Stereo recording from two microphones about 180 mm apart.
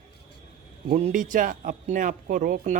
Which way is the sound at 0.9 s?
45° right (ahead or behind).